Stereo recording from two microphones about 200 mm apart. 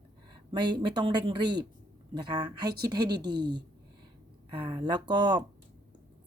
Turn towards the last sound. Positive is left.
turn(degrees=-20)  # may be behind; listen again after turning